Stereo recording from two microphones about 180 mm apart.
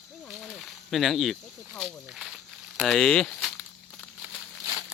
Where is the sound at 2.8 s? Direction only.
5° left (ahead or behind).